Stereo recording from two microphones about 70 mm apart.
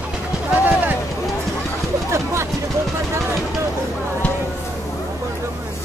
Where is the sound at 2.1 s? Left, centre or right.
Right.